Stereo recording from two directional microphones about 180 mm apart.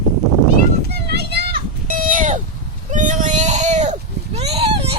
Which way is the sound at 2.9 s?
45° right (ahead or behind).